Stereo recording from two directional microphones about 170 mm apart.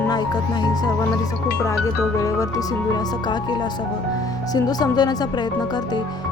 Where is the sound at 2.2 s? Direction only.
20° left (ahead or behind).